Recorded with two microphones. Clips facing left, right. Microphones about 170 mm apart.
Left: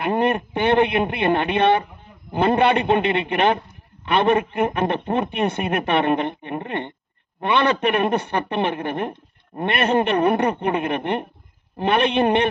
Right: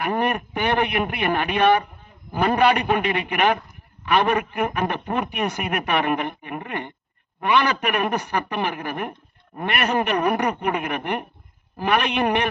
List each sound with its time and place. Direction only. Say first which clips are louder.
0.0 s a man's voice: left 3 dB; 25° left (ahead or behind)